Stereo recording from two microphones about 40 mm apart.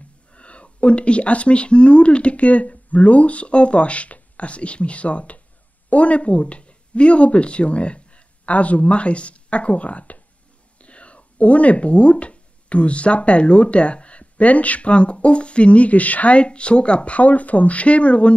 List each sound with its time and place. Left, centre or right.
0.3 s speech: left